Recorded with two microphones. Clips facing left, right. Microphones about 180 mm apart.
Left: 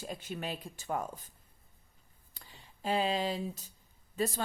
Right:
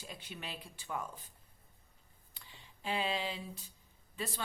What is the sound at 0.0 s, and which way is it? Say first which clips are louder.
A woman's voice: left 8 dB; 45° left (ahead or behind).